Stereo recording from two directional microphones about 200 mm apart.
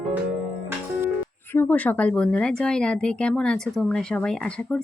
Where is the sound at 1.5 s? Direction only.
10° left (ahead or behind).